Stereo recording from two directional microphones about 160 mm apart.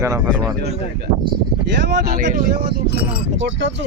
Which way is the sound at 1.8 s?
90° right.